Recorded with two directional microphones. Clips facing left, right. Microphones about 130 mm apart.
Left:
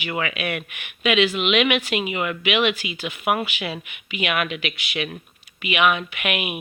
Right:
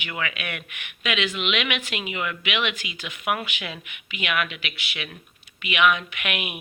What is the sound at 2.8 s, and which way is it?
Speech, 35° right (ahead or behind).